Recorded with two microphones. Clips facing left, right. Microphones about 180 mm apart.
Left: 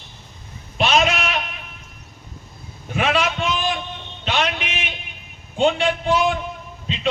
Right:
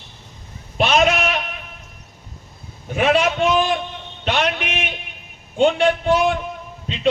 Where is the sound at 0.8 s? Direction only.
50° right (ahead or behind).